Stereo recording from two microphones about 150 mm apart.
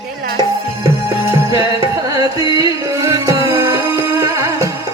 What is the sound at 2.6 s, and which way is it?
Music, 20° right (ahead or behind).